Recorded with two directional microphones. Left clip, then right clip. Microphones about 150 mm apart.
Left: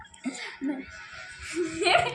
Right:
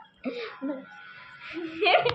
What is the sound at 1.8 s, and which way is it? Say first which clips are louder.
Speech: right 1 dB; 30° right (ahead or behind).